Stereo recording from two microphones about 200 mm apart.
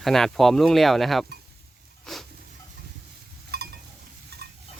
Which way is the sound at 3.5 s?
55° right (ahead or behind).